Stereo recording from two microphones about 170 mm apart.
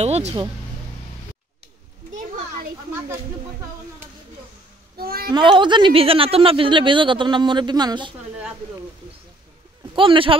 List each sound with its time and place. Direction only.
0.0 s speech: 40° right (ahead or behind)
2.1 s a sound: 55° right (ahead or behind)
4.9 s child singing: 65° right (ahead or behind)
5.3 s speech: 30° right (ahead or behind)
9.9 s speech: 30° right (ahead or behind)